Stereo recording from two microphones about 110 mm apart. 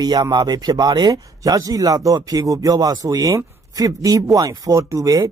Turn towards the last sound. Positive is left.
turn(degrees=-35)  # may be behind; listen again after turning